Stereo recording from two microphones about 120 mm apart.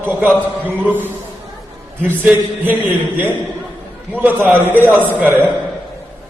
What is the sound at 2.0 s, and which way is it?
A man's voice, 15° right (ahead or behind).